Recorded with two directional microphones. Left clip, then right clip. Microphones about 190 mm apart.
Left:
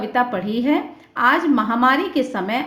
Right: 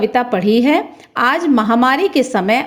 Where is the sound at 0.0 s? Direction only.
40° right (ahead or behind).